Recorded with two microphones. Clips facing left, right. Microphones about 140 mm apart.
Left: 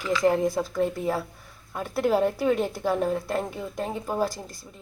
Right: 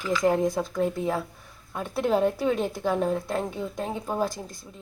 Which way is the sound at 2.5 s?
20° right (ahead or behind).